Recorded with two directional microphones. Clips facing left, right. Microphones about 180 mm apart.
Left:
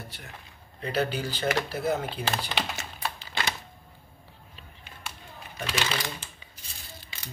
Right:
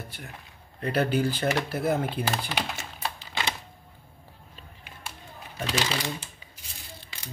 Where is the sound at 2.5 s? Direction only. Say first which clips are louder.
Even; 10° right (ahead or behind).